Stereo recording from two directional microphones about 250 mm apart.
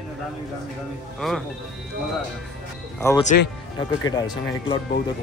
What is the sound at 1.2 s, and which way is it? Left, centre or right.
Speech, centre.